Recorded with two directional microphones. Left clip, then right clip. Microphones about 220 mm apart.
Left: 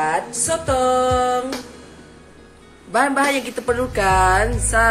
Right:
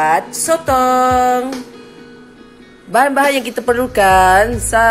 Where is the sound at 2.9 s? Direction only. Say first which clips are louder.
Right 5 dB; 30° right (ahead or behind).